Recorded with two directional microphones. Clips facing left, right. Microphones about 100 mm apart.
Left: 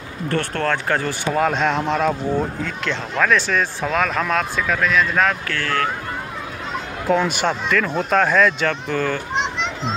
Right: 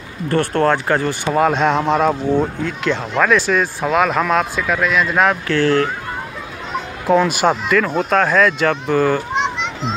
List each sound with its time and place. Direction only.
0.3 s speech: 15° right (ahead or behind)
5.5 s speech: 30° right (ahead or behind)
7.1 s speech: 5° right (ahead or behind)